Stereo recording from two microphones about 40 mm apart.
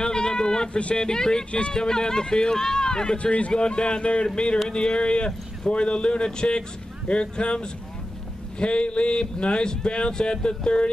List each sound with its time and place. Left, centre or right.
0.0 s a sound: centre
0.7 s speech: left
1.0 s speech: centre
3.2 s speech: left